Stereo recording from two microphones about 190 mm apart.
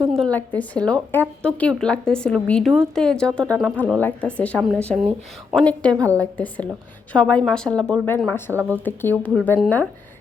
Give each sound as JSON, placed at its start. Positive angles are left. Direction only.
{"t": 0.2, "sound": "speech", "side_deg": 10}
{"t": 5.9, "sound": "a woman's voice", "side_deg": -15}
{"t": 6.3, "sound": "speech", "side_deg": 10}